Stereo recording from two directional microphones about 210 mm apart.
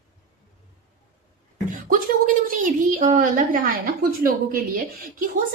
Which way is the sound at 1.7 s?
40° right (ahead or behind).